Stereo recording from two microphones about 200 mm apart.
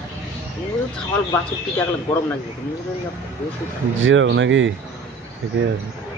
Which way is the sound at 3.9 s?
75° right (ahead or behind).